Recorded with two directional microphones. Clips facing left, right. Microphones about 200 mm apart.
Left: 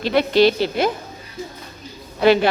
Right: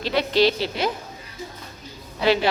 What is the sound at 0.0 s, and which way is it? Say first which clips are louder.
Speech: left 4 dB; 55° left (ahead or behind).